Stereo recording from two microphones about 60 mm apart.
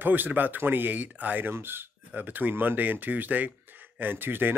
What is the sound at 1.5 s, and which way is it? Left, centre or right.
Speech, right.